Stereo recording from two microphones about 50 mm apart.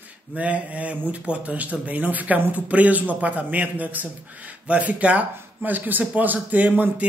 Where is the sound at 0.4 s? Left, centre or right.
Right.